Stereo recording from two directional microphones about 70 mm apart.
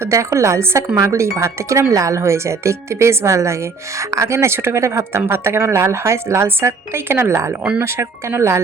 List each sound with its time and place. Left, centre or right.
0.0 s a woman's voice: right